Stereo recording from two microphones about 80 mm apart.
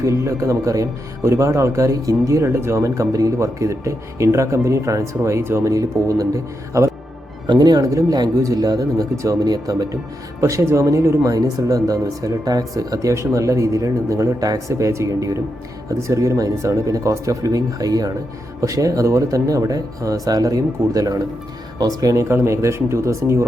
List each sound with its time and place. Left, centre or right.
0.0 s speech: right
5.6 s speech: right
7.4 s speech: right
10.4 s speech: right
11.3 s speech: right